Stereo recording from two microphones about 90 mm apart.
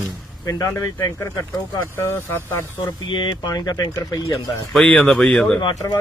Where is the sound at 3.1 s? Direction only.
60° left (ahead or behind).